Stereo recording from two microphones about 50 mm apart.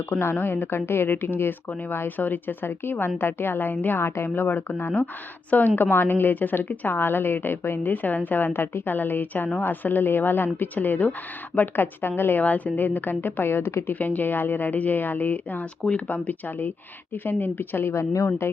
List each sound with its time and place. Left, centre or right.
0.1 s speech: left
4.0 s speech: left
4.4 s a woman's voice: left
8.0 s a woman's voice: left
12.4 s a woman's voice: left
14.0 s a woman's voice: left